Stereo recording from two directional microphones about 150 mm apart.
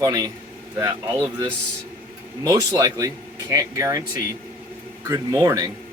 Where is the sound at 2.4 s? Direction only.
20° right (ahead or behind).